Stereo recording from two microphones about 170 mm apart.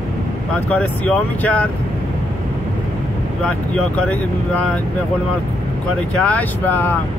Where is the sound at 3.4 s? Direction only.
5° left (ahead or behind).